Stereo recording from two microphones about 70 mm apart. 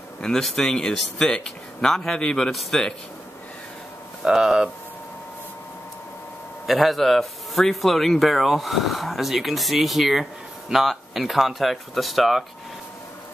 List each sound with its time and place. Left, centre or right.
0.2 s speech: centre
4.2 s speech: centre
6.6 s speech: centre